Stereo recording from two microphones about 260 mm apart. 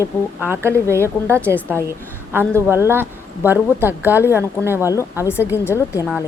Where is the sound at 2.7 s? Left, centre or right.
Centre.